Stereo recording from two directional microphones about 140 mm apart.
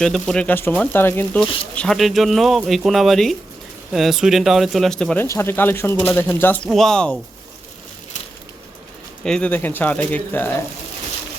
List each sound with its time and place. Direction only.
0.0 s speech: 5° left (ahead or behind)
5.2 s speech: 20° left (ahead or behind)
6.7 s speech: centre (ahead or behind)
9.2 s speech: 5° left (ahead or behind)